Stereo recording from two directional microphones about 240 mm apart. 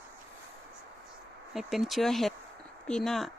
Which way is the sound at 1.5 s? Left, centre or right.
Centre.